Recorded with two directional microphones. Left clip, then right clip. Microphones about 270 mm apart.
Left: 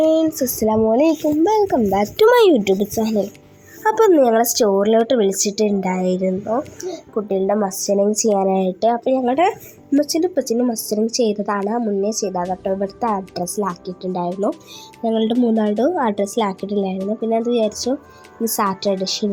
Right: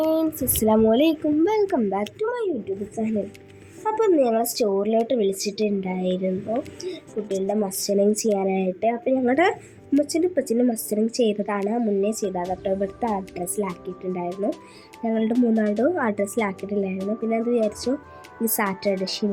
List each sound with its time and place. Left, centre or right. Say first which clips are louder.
0.1 s a sound: left 6 dB; centre
0.6 s a woman's voice: left 3 dB; centre
1.9 s speech: left 9 dB; centre
2.2 s speech: left 18 dB; left; by 9.2 s centre
9.2 s speech: left 3 dB; centre
10.0 s a woman's voice: left 4 dB; centre
15.3 s a woman's voice: left 4 dB; centre